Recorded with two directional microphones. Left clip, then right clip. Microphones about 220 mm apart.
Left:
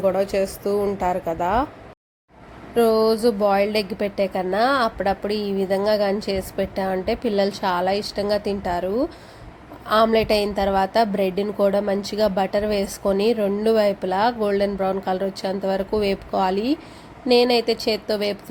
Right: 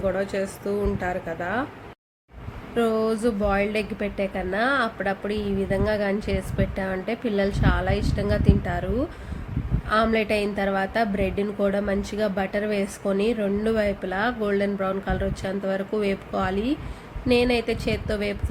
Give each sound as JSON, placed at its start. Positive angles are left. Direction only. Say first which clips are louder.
{"t": 0.2, "sound": "a woman's voice", "louder": "left 5 dB", "side_deg": 25}
{"t": 2.7, "sound": "a woman's voice", "louder": "left 6 dB", "side_deg": 20}